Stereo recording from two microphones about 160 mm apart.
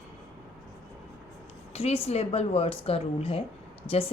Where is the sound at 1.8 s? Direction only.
40° left (ahead or behind).